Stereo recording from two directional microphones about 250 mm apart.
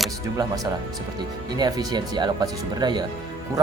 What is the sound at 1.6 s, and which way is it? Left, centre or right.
Speech, centre.